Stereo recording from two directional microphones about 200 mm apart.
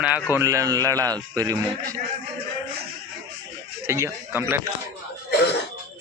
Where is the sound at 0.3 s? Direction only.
15° right (ahead or behind).